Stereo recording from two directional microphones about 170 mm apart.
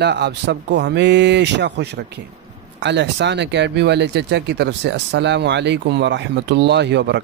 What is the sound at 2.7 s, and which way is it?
Speech, 90° right.